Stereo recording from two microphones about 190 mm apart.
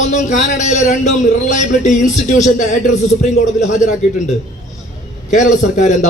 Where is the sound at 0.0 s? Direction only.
40° left (ahead or behind).